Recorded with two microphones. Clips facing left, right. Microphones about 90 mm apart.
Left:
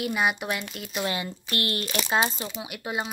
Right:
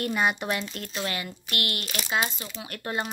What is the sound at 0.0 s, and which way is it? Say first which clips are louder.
Speech: even; 5° left (ahead or behind).